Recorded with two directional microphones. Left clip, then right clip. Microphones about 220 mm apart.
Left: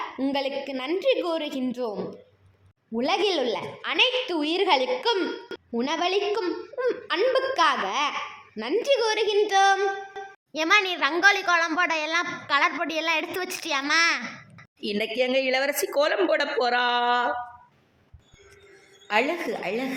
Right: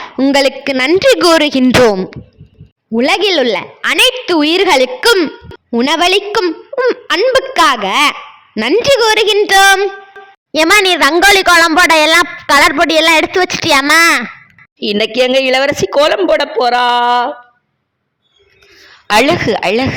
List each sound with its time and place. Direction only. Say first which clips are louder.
0.2 s a woman's voice: right 17 dB; 40° right (ahead or behind)
14.8 s speech: right 14 dB; 35° right (ahead or behind)
19.0 s speech: right 15 dB; 40° right (ahead or behind)